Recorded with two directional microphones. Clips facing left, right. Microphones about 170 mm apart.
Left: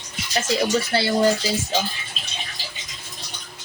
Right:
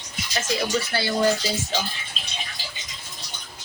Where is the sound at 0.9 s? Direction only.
30° left (ahead or behind).